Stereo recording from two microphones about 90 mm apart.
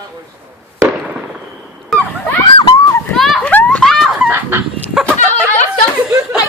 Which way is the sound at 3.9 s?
5° left (ahead or behind).